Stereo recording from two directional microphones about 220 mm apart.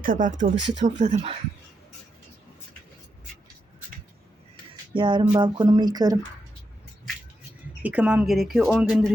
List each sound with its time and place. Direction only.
0.0 s speech: 35° right (ahead or behind)
4.9 s speech: 20° right (ahead or behind)
7.8 s speech: 5° right (ahead or behind)